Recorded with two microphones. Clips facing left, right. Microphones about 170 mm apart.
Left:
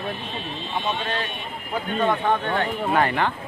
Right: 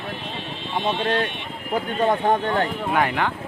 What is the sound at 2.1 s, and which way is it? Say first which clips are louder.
Speech: right 3 dB; 40° right (ahead or behind).